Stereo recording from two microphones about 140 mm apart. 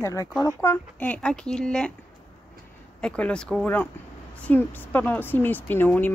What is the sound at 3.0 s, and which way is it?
A woman's voice, 5° left (ahead or behind).